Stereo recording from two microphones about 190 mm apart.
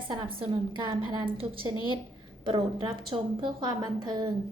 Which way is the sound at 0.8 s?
20° right (ahead or behind).